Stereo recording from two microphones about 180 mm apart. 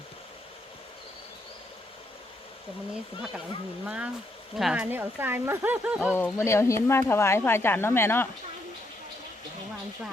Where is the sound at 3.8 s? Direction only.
5° right (ahead or behind).